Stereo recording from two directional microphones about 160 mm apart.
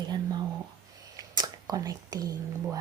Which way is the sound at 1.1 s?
25° right (ahead or behind).